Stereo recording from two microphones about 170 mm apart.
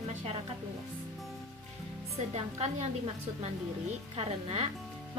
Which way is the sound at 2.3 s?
40° right (ahead or behind).